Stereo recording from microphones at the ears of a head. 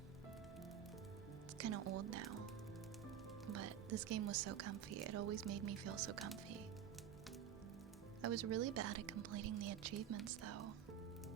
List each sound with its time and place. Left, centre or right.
1.5 s speech: right
8.2 s speech: right